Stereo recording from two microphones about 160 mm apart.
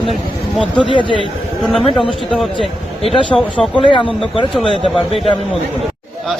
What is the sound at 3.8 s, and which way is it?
Speech, 30° left (ahead or behind).